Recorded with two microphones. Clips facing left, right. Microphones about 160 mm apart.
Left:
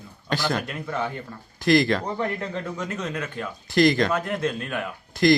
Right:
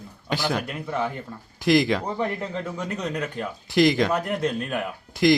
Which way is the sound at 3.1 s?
35° right (ahead or behind).